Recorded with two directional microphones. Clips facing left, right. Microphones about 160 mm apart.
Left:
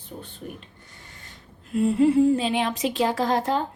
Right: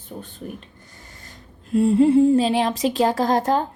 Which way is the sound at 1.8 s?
30° right (ahead or behind).